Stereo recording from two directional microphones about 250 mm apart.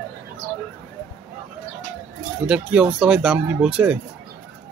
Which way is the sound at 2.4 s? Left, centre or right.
Centre.